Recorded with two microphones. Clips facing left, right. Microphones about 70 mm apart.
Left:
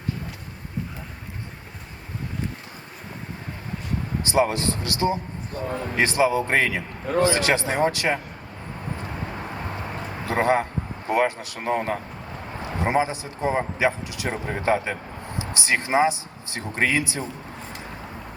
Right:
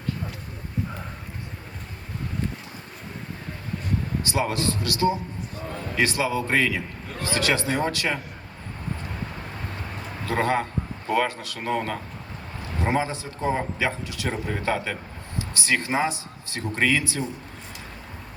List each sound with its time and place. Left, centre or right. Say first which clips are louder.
4.2 s a man's voice: left 7 dB; left
10.2 s a man's voice: left 3 dB; left